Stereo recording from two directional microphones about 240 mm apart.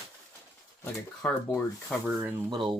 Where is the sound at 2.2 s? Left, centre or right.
Centre.